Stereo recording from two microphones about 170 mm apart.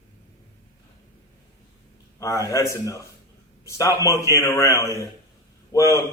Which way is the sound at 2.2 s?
20° left (ahead or behind).